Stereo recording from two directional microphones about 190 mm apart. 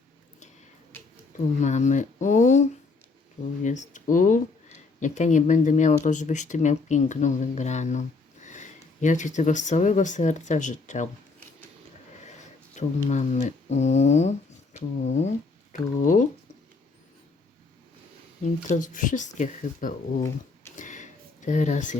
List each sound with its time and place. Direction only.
1.5 s speech: 40° left (ahead or behind)
12.2 s speech: 40° left (ahead or behind)
18.4 s speech: 40° left (ahead or behind)
20.7 s a sound: 40° left (ahead or behind)